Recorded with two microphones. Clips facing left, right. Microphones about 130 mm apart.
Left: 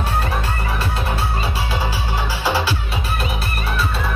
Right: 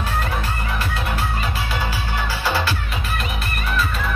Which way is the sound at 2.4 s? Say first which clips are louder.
Left 2 dB; 10° left (ahead or behind).